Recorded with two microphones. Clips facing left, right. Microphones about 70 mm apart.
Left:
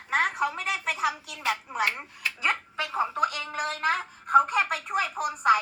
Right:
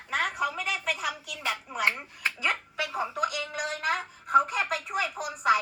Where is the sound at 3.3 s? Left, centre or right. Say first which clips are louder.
Left 1 dB; left.